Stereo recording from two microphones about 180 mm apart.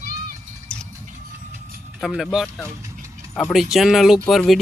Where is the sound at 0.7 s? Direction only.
5° left (ahead or behind).